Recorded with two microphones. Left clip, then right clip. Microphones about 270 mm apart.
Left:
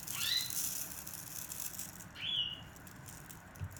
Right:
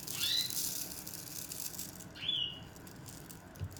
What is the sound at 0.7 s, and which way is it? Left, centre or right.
Owl, centre.